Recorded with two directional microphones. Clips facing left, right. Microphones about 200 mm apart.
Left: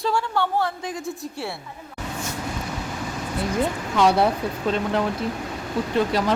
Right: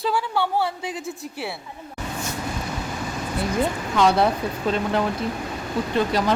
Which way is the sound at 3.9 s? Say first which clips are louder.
Even; 10° left (ahead or behind).